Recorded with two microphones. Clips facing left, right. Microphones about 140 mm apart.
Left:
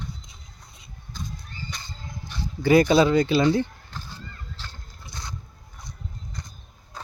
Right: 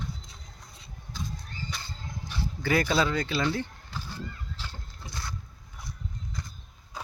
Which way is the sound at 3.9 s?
10° right (ahead or behind).